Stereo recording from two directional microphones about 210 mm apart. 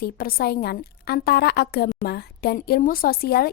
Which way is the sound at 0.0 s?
45° left (ahead or behind).